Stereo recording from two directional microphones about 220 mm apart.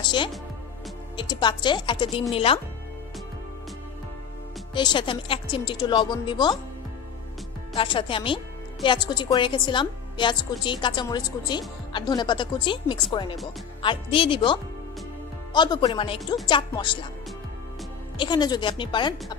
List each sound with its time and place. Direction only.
0.0 s music: 20° left (ahead or behind)
1.1 s a woman's voice: 20° left (ahead or behind)
4.7 s a woman's voice: 20° left (ahead or behind)
7.7 s a woman's voice: 25° left (ahead or behind)
18.1 s a woman's voice: 20° left (ahead or behind)